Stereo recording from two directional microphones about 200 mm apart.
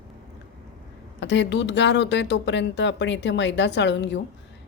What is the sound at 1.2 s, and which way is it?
Speech, 60° left (ahead or behind).